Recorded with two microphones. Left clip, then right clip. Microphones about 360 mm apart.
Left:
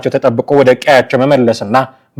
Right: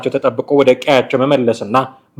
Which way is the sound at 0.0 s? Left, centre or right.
Left.